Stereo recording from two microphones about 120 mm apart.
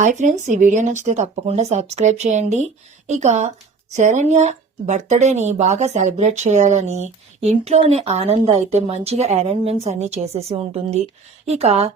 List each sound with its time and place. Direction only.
0.0 s speech: 90° right; by 7.1 s 75° right (ahead or behind)
7.6 s a woman's voice: 60° right (ahead or behind)